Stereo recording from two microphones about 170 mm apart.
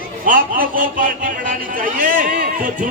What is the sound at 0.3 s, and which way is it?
A man's voice, 50° right (ahead or behind).